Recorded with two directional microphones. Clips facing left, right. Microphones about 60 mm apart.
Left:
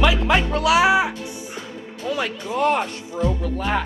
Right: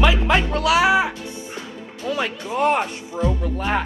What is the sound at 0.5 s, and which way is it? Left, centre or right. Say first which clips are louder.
Speech: left 1 dB; left.